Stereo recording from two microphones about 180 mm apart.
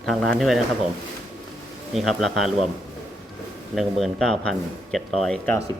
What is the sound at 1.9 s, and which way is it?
Speech, centre (ahead or behind).